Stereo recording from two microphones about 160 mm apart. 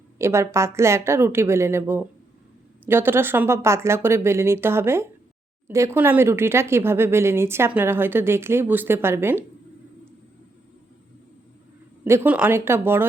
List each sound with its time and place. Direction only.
0.2 s speech: 15° right (ahead or behind)
12.0 s speech: 15° right (ahead or behind)